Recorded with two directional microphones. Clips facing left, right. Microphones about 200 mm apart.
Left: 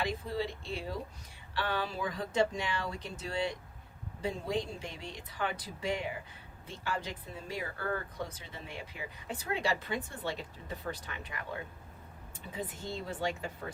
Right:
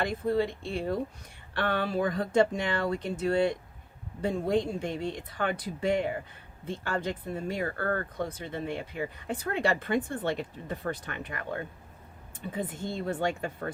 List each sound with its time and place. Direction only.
0.0 s speech: 55° right (ahead or behind)